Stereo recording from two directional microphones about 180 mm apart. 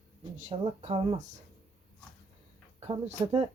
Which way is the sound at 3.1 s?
40° right (ahead or behind).